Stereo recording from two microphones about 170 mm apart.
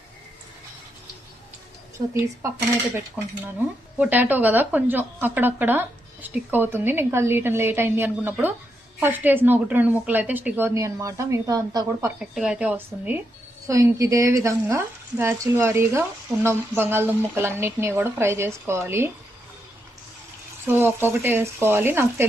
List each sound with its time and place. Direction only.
2.0 s speech: 25° right (ahead or behind)
3.9 s speech: 10° right (ahead or behind)
12.2 s speech: 5° right (ahead or behind)
20.7 s speech: 15° right (ahead or behind)